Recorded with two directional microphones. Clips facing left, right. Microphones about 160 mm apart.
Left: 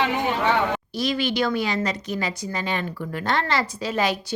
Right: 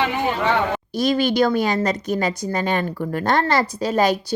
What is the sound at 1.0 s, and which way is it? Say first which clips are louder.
A woman's voice: right 6 dB; 45° right (ahead or behind).